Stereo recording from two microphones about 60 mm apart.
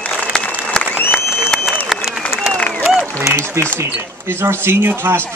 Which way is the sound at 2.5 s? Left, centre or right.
Left.